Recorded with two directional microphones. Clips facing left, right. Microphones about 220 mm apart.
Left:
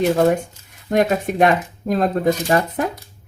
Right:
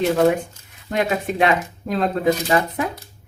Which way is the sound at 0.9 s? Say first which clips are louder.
Left 4 dB; 45° left (ahead or behind).